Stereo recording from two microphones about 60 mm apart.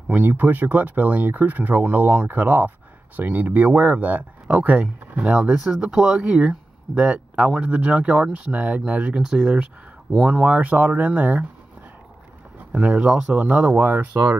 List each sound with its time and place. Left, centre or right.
0.1 s speech: right
9.2 s speech: centre
10.6 s speech: right
12.8 s speech: centre
13.4 s speech: right